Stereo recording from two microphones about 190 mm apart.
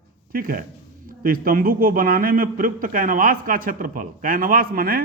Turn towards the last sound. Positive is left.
turn(degrees=-50)  # may be behind; listen again after turning